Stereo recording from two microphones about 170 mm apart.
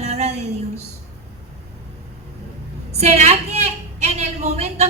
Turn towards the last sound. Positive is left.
turn(degrees=-40)  # may be behind; listen again after turning